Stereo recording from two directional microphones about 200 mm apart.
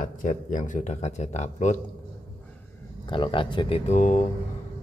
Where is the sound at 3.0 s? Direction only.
25° left (ahead or behind).